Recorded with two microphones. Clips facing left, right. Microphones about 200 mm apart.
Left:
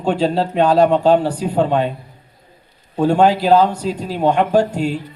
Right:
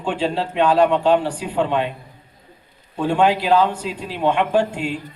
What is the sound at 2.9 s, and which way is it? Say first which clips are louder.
A man's voice: left 4 dB; 40° left (ahead or behind).